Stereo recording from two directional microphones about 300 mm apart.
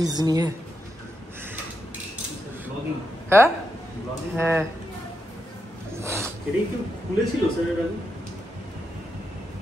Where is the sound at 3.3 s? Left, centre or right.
Centre.